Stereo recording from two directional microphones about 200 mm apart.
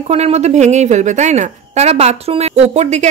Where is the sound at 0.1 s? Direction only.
30° right (ahead or behind).